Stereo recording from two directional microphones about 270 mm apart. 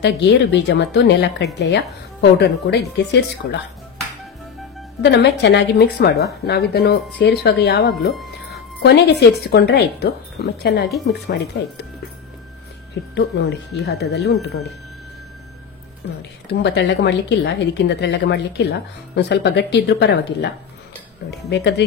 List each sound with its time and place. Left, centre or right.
0.0 s speech: left
5.0 s speech: left
8.1 s a sound: centre
8.8 s speech: left
13.1 s speech: left
16.4 s speech: left